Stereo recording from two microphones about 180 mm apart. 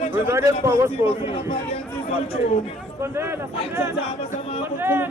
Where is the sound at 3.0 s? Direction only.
15° right (ahead or behind).